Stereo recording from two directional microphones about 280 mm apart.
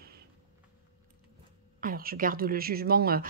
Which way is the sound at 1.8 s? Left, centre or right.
Right.